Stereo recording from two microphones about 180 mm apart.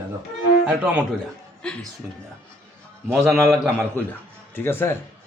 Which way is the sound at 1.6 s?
5° left (ahead or behind).